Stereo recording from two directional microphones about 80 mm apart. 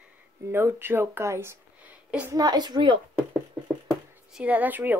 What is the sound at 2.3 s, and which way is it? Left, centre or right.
Speech, right.